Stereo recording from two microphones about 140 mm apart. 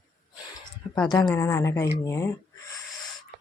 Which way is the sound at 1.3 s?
20° left (ahead or behind).